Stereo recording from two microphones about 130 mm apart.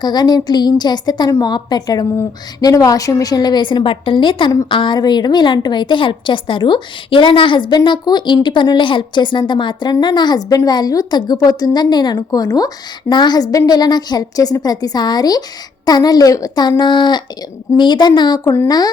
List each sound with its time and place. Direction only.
0.0 s a woman's voice: 30° left (ahead or behind)